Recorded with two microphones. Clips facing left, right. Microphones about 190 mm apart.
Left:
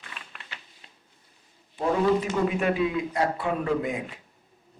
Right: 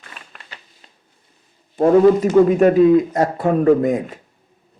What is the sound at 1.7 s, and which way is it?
Speech, 45° right (ahead or behind).